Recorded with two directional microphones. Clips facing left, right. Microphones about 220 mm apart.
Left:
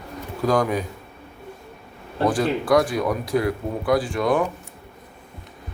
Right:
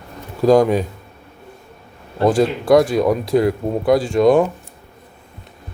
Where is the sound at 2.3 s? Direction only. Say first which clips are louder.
Right 6 dB; 25° right (ahead or behind).